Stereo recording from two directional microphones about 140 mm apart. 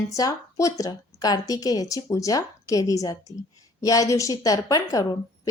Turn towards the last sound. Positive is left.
turn(degrees=25)  # may be behind; listen again after turning